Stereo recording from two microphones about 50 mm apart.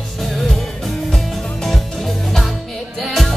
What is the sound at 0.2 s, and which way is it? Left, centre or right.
Music, centre.